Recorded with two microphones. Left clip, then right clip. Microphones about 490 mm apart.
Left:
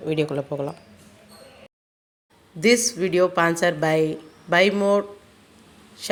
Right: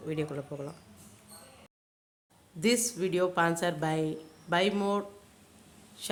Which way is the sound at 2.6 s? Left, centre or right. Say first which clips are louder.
Left 10 dB; right.